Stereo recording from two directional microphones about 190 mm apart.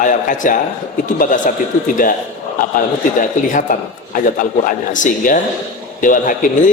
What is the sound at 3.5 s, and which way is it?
A man's voice, 45° left (ahead or behind).